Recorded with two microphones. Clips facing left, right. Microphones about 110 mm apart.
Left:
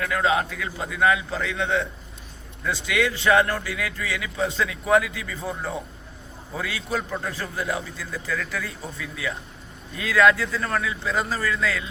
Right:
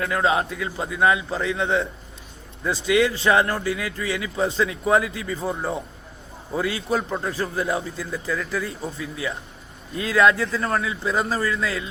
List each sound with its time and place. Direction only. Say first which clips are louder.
0.0 s speech: right 1 dB; 25° right (ahead or behind)